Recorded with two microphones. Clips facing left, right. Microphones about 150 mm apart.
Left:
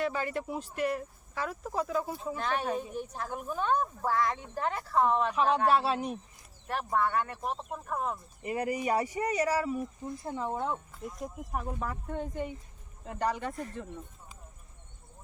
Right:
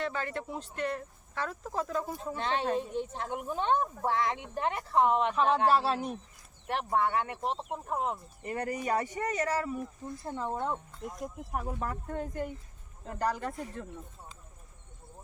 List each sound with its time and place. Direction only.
0.0 s speech: 10° left (ahead or behind)
2.3 s speech: 25° right (ahead or behind)
5.3 s speech: centre (ahead or behind)
6.7 s speech: 20° right (ahead or behind)
8.4 s speech: 10° left (ahead or behind)